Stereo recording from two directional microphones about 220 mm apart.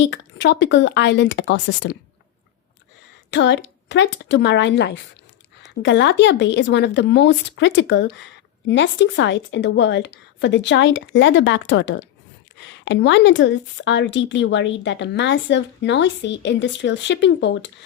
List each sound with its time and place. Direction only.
0.0 s speech: 55° left (ahead or behind)
3.2 s speech: 55° left (ahead or behind)